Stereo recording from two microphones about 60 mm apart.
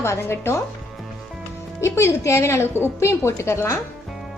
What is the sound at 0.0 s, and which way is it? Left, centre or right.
Speech, left.